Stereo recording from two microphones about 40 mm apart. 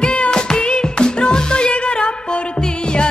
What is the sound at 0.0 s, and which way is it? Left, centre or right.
Music, left.